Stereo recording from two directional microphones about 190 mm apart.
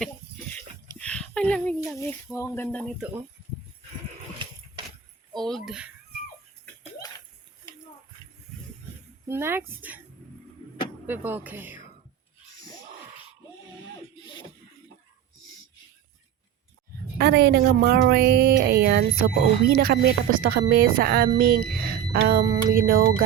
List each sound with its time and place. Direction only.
0.5 s a sound: 5° left (ahead or behind)
2.0 s speech: 15° left (ahead or behind)
5.4 s speech: centre (ahead or behind)
9.3 s a woman's voice: 10° right (ahead or behind)
11.0 s a woman's voice: 10° right (ahead or behind)
17.2 s a woman's voice: 60° right (ahead or behind)